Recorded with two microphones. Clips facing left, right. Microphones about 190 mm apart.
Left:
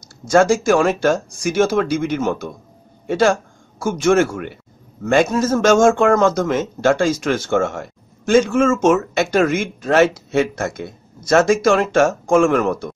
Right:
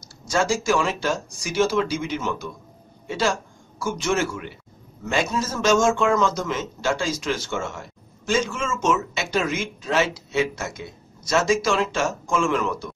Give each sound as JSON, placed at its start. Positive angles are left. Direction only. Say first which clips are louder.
{"t": 0.0, "sound": "speech", "louder": "left 9 dB", "side_deg": 50}